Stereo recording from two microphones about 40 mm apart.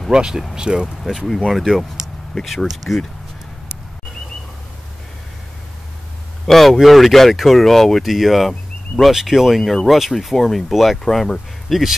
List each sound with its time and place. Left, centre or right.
0.1 s speech: right
1.0 s speech: centre
2.9 s speech: left
6.4 s speech: centre
9.6 s speech: centre
9.8 s speech: centre